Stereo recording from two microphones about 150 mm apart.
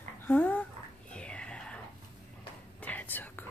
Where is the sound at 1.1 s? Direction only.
5° left (ahead or behind).